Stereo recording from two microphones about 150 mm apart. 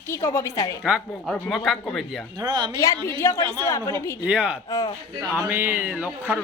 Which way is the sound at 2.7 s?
20° left (ahead or behind).